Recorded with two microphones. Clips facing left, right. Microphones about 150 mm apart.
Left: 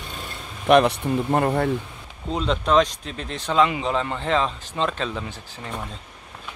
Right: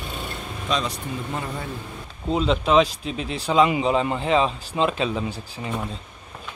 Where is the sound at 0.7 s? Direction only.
60° left (ahead or behind).